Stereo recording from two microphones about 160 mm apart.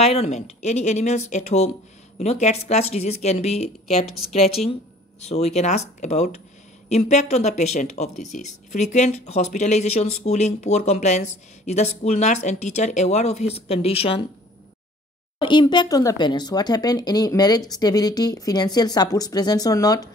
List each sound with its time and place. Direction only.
0.0 s a woman's voice: 40° left (ahead or behind)
15.4 s speech: 30° left (ahead or behind)